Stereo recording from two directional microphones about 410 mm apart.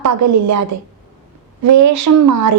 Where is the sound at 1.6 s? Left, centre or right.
Right.